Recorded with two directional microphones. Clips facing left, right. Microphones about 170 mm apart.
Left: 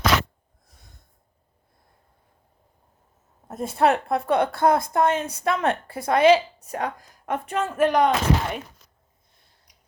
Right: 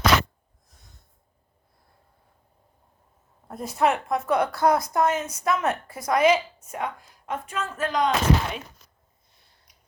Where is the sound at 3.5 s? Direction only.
25° left (ahead or behind).